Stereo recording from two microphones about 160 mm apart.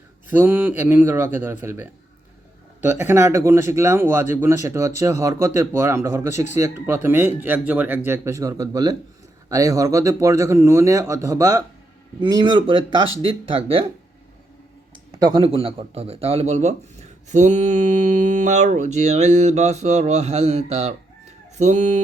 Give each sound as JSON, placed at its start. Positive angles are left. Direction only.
{"t": 0.3, "sound": "speech", "side_deg": -10}
{"t": 14.9, "sound": "speech", "side_deg": -30}